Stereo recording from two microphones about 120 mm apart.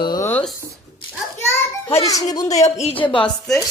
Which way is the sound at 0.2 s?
15° left (ahead or behind).